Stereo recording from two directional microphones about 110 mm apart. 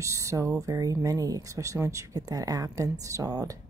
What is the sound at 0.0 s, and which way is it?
A woman's voice, 30° right (ahead or behind).